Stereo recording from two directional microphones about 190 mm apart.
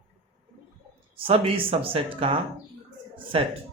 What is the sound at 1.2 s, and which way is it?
Speech, 30° right (ahead or behind).